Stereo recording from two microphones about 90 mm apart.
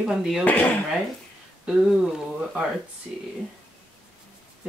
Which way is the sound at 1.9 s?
5° right (ahead or behind).